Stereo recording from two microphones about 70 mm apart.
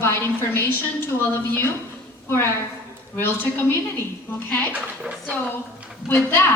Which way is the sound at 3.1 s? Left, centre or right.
Left.